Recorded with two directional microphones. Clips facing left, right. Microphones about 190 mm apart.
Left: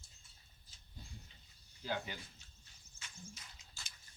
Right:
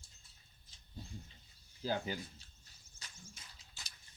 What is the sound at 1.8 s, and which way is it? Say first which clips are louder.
Speech: right 4 dB; 35° right (ahead or behind).